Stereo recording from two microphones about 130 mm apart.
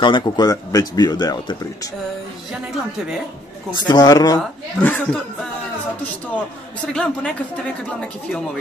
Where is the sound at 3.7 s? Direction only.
35° left (ahead or behind).